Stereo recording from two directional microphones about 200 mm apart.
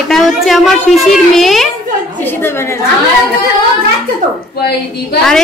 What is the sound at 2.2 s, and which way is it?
Speech, 10° left (ahead or behind).